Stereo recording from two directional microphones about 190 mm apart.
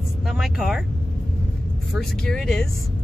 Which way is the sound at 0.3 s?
Centre (ahead or behind).